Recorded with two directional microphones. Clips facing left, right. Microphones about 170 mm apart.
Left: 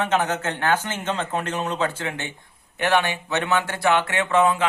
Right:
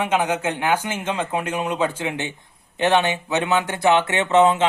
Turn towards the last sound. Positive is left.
turn(degrees=-25)  # may be behind; listen again after turning